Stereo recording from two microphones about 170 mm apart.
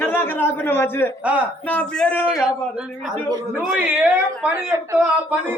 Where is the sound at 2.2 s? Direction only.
5° right (ahead or behind).